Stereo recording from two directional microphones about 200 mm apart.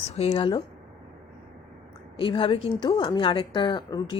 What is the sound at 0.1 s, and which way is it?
Speech, 30° left (ahead or behind).